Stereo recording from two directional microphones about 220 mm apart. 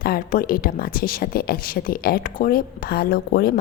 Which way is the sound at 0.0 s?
40° left (ahead or behind).